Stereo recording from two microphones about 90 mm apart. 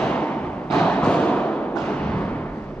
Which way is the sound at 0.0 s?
15° left (ahead or behind).